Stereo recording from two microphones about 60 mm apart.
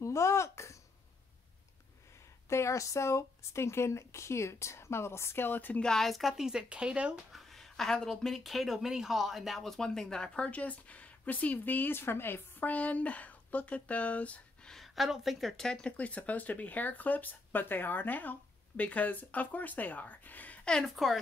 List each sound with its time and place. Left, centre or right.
0.0 s a sound: left
2.5 s speech: left
5.8 s speech: centre
7.3 s speech: centre; by 14.7 s left
14.7 s speech: centre; by 20.6 s left
20.9 s speech: centre